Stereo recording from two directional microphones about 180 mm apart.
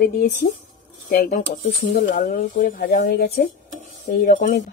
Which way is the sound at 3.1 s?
65° left (ahead or behind).